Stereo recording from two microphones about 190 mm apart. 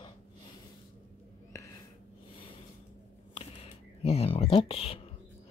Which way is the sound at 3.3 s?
30° left (ahead or behind).